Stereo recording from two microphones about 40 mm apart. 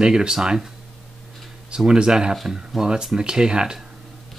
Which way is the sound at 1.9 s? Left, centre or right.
Centre.